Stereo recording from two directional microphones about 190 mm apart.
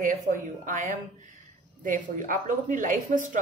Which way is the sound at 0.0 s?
45° right (ahead or behind).